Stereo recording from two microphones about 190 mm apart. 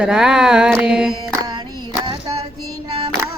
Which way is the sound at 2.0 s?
25° right (ahead or behind).